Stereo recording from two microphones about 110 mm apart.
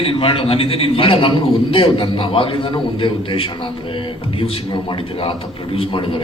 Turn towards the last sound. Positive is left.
turn(degrees=55)  # may be behind; listen again after turning